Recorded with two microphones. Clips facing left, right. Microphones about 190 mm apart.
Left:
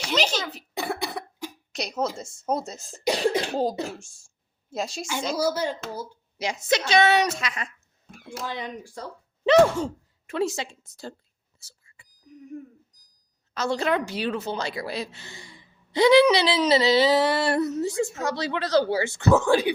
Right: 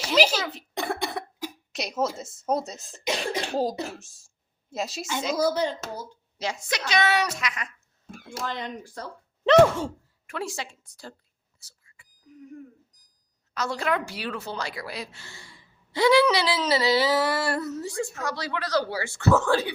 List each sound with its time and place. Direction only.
0.0 s cough: 5° right (ahead or behind)
0.7 s cough: 5° left (ahead or behind)
3.5 s speech: centre (ahead or behind)
5.4 s speech: 10° left (ahead or behind)
6.4 s speech: 20° left (ahead or behind)
8.4 s speech: 10° left (ahead or behind)
9.5 s speech: centre (ahead or behind)
10.2 s speech: 25° left (ahead or behind)
11.6 s a sound: 25° left (ahead or behind)
13.5 s speech: 25° left (ahead or behind)